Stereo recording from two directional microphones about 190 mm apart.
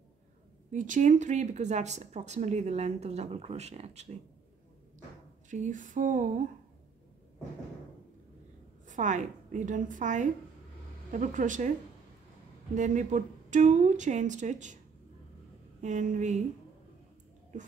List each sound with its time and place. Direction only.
0.7 s speech: 40° right (ahead or behind)
5.5 s a sound: 40° right (ahead or behind)
8.8 s speech: 40° right (ahead or behind)
12.7 s speech: 40° right (ahead or behind)
15.8 s speech: 40° right (ahead or behind)